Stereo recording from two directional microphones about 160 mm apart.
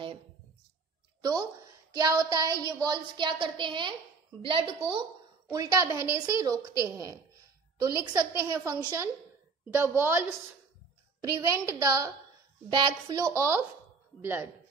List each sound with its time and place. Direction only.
1.2 s a woman's voice: 25° right (ahead or behind)
5.5 s a woman's voice: 20° right (ahead or behind)
9.8 s a woman's voice: 15° right (ahead or behind)